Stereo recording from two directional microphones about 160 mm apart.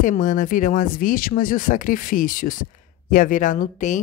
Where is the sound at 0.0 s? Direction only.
55° left (ahead or behind).